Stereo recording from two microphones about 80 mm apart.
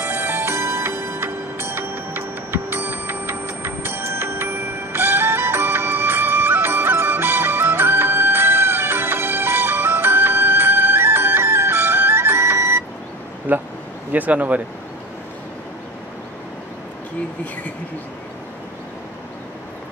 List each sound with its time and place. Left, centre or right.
0.0 s music: right
13.5 s a sound: right
14.1 s speech: right